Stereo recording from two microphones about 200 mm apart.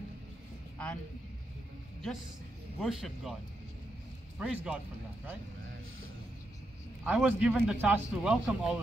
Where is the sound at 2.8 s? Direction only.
Centre (ahead or behind).